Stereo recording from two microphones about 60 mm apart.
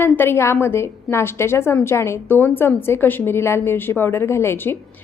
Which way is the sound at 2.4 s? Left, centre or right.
Left.